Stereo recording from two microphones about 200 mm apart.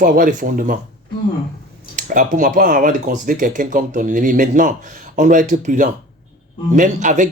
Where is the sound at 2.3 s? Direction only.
40° right (ahead or behind).